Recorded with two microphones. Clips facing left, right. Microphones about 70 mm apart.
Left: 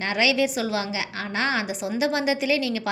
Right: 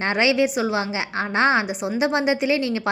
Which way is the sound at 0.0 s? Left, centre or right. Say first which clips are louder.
Right 3 dB; right.